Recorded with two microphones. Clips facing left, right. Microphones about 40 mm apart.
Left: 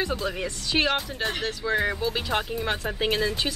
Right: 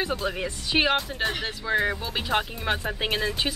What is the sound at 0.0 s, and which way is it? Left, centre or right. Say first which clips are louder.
Speech: even; centre.